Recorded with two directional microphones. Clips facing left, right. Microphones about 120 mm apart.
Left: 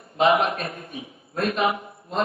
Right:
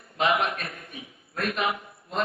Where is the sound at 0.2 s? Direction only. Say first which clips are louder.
Left 5 dB; 25° left (ahead or behind).